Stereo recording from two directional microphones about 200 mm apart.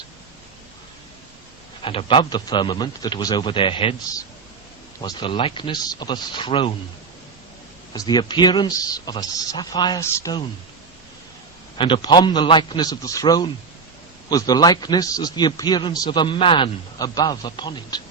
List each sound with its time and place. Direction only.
1.8 s a man's voice: 25° left (ahead or behind)
7.9 s a man's voice: 20° left (ahead or behind)
11.8 s a man's voice: 25° left (ahead or behind)